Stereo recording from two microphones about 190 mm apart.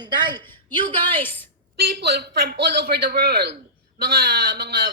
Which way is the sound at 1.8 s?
55° right (ahead or behind).